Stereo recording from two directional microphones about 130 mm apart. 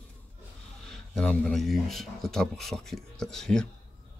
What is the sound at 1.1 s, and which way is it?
Speech, 5° left (ahead or behind).